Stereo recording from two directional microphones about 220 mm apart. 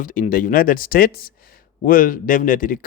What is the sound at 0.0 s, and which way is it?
Speech, 35° left (ahead or behind).